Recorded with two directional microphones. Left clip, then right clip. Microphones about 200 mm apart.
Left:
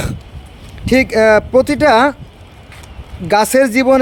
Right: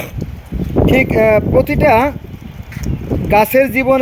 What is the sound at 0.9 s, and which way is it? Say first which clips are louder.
Speech: left 2 dB; 25° left (ahead or behind).